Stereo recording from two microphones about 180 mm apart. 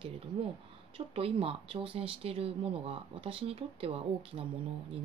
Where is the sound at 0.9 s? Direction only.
30° right (ahead or behind).